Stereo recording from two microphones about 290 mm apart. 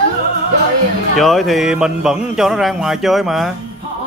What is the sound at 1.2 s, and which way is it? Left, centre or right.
Speech, centre.